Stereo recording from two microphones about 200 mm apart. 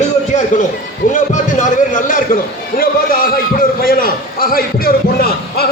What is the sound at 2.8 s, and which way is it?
A man's voice, 45° left (ahead or behind).